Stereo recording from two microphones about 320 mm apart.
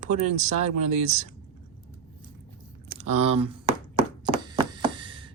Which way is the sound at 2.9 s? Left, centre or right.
Right.